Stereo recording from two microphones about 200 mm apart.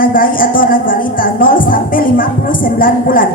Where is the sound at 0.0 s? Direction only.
45° left (ahead or behind).